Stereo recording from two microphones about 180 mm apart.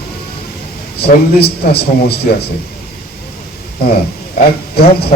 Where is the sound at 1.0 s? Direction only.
65° left (ahead or behind).